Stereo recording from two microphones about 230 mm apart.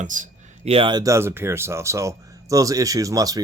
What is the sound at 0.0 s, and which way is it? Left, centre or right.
Speech, right.